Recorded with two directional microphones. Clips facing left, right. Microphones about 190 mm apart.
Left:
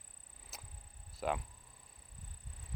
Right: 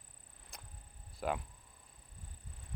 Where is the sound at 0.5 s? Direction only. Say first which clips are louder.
Even; 5° left (ahead or behind).